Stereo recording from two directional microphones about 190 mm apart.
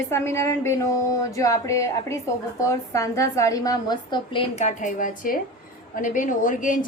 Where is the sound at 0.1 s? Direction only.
15° left (ahead or behind).